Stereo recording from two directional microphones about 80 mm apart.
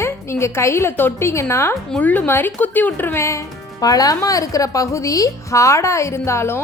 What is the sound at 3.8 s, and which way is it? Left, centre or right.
A woman's voice, left.